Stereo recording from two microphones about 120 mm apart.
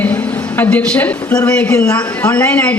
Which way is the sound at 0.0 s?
15° left (ahead or behind).